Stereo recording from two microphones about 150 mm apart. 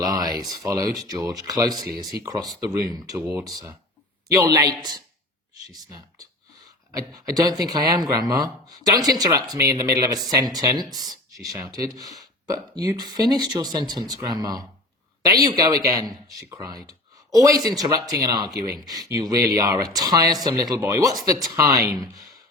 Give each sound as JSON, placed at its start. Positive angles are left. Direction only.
{"t": 0.0, "sound": "speech", "side_deg": -25}